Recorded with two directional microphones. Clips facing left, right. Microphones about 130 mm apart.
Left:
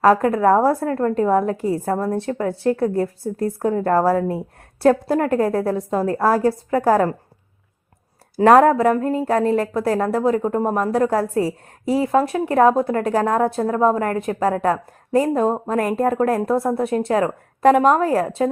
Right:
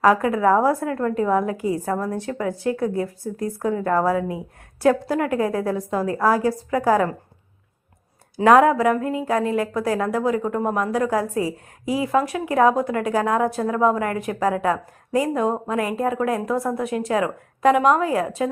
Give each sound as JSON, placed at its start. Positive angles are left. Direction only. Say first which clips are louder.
{"t": 0.0, "sound": "speech", "louder": "left 2 dB", "side_deg": 35}
{"t": 8.4, "sound": "speech", "louder": "left 2 dB", "side_deg": 40}
{"t": 16.5, "sound": "a woman's voice", "louder": "left 4 dB", "side_deg": 30}